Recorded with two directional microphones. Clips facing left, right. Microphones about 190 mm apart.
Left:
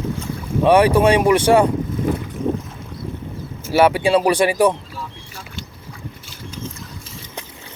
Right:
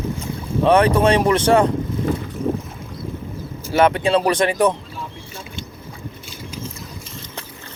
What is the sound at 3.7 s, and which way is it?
Speech, 10° left (ahead or behind).